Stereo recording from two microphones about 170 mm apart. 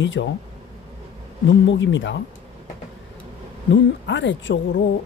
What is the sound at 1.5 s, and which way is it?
Speech, 90° left.